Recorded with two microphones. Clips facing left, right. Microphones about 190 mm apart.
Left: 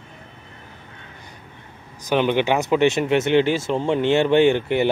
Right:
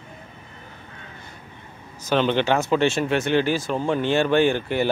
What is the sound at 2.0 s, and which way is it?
Speech, 15° left (ahead or behind).